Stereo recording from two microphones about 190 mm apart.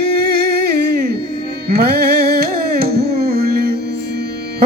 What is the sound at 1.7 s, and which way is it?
Carnatic music, 55° right (ahead or behind).